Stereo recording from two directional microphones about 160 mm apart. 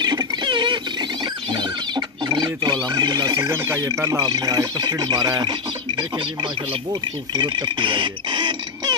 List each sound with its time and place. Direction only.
0.0 s a sound: 25° right (ahead or behind)
1.2 s rodents: 30° right (ahead or behind)
2.9 s speech: 25° right (ahead or behind)